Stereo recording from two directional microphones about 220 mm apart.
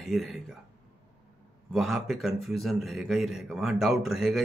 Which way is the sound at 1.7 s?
Centre (ahead or behind).